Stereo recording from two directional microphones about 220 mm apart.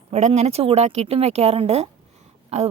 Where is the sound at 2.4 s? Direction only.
30° right (ahead or behind).